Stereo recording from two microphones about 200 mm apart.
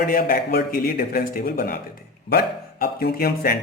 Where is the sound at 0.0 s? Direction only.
45° left (ahead or behind).